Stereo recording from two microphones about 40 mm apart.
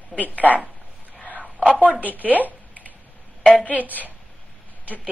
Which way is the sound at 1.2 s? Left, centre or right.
Left.